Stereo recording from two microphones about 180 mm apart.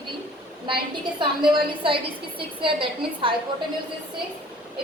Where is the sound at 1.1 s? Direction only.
25° right (ahead or behind).